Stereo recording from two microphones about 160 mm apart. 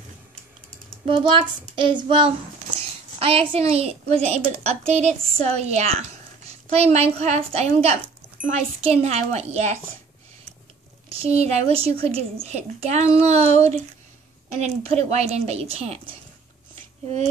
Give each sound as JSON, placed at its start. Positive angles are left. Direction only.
{"t": 1.0, "sound": "a woman's voice", "side_deg": -35}
{"t": 11.1, "sound": "a woman's voice", "side_deg": -40}